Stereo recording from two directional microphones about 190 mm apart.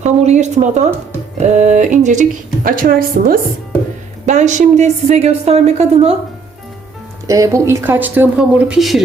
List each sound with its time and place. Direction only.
0.0 s a woman's voice: 35° right (ahead or behind)
4.3 s a woman's voice: 40° right (ahead or behind)
7.3 s speech: 15° right (ahead or behind); by 9.0 s centre (ahead or behind)